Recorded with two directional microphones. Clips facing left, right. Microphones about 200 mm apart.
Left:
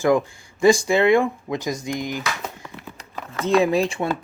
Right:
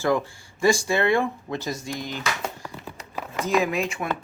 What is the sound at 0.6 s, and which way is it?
Speech, 20° left (ahead or behind).